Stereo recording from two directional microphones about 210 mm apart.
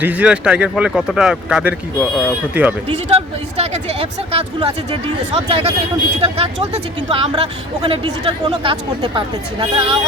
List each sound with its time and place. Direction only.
0.0 s speech: 5° right (ahead or behind)
3.2 s speech: 30° right (ahead or behind)